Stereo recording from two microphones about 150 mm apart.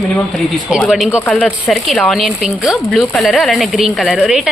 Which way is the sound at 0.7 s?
Centre (ahead or behind).